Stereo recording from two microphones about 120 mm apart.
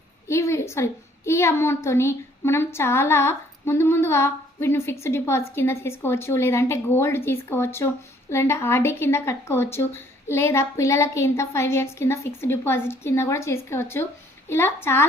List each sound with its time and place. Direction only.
0.3 s a child's voice: 25° left (ahead or behind)